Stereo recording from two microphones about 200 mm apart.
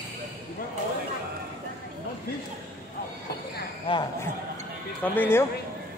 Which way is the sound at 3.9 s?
20° left (ahead or behind).